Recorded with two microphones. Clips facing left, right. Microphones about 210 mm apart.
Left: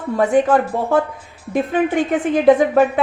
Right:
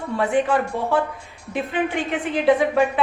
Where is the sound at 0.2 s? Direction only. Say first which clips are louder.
Left 5 dB; 45° left (ahead or behind).